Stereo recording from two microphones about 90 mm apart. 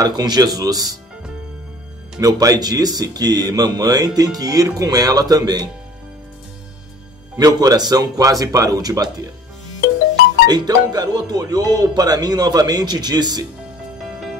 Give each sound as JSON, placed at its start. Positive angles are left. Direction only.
{"t": 0.0, "sound": "speech", "side_deg": -50}
{"t": 2.1, "sound": "speech", "side_deg": -40}
{"t": 7.3, "sound": "speech", "side_deg": -45}
{"t": 10.4, "sound": "speech", "side_deg": -50}